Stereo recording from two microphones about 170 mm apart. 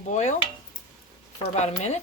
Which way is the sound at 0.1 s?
45° left (ahead or behind).